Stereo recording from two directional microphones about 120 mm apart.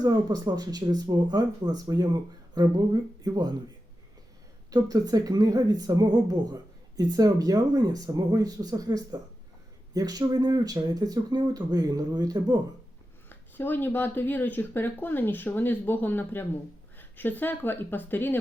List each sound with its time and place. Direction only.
0.0 s speech: 30° right (ahead or behind)
4.7 s speech: 30° right (ahead or behind)
13.6 s speech: 15° left (ahead or behind)